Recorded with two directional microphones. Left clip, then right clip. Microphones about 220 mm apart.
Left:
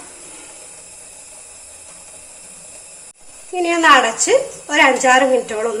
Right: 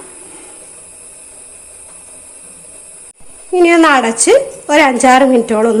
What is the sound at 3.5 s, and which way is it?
A woman's voice, 50° right (ahead or behind).